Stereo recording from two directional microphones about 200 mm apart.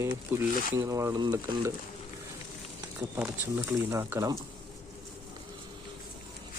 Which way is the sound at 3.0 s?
10° right (ahead or behind).